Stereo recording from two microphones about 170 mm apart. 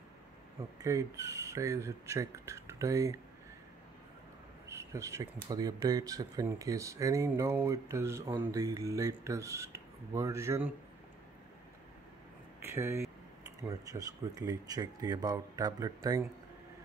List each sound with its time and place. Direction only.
0.8 s speech: 20° right (ahead or behind)
4.6 s speech: 15° right (ahead or behind)
12.6 s speech: 15° right (ahead or behind)